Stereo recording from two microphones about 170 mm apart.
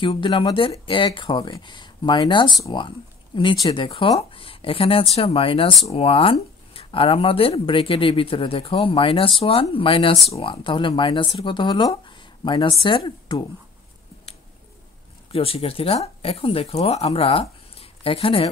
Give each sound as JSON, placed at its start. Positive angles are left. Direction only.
{"t": 0.0, "sound": "speech", "side_deg": 30}
{"t": 15.3, "sound": "speech", "side_deg": 35}